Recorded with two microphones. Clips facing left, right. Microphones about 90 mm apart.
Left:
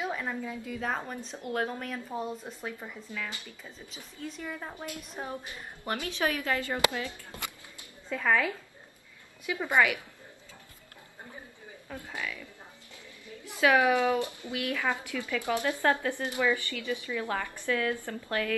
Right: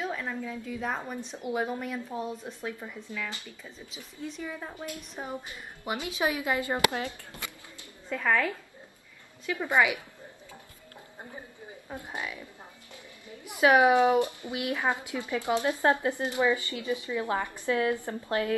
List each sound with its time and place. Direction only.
0.0 s a woman's voice: 5° left (ahead or behind)
5.9 s speech: 10° right (ahead or behind)
8.1 s a woman's voice: centre (ahead or behind)
9.7 s a woman's voice: 20° right (ahead or behind)
11.9 s a woman's voice: 20° right (ahead or behind)